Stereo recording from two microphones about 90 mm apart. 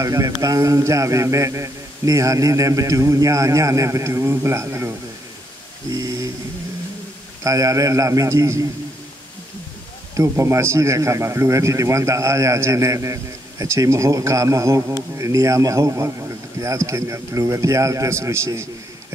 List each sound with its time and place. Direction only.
0.0 s a man's voice: 35° right (ahead or behind)
5.9 s a man's voice: 40° right (ahead or behind)
7.4 s a man's voice: 40° right (ahead or behind)
10.1 s a man's voice: 35° right (ahead or behind)